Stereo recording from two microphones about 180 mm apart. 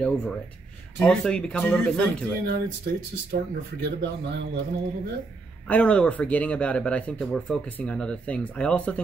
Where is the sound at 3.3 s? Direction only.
55° right (ahead or behind).